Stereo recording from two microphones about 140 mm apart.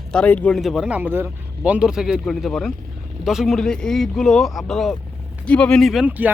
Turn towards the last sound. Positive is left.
turn(degrees=-10)  # may be behind; listen again after turning